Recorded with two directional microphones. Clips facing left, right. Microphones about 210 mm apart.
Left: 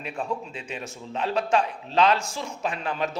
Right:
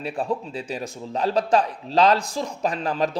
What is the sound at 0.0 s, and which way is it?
Speech, 35° right (ahead or behind).